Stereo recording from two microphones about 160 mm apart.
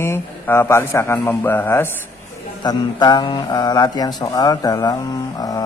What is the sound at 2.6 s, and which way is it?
A man's voice, 25° left (ahead or behind).